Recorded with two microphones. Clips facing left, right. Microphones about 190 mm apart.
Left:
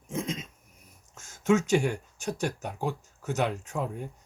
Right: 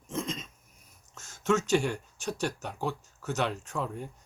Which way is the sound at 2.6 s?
15° left (ahead or behind).